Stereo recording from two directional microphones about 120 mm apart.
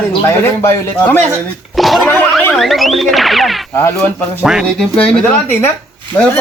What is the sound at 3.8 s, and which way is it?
A man's voice, 15° left (ahead or behind).